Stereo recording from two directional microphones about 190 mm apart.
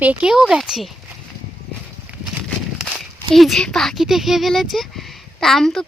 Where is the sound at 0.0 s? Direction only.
5° right (ahead or behind).